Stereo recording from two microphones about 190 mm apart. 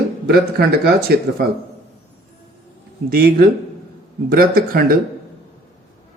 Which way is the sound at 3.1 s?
50° right (ahead or behind).